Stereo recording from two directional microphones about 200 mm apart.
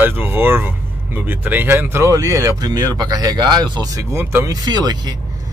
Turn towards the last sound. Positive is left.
turn(degrees=-20)  # may be behind; listen again after turning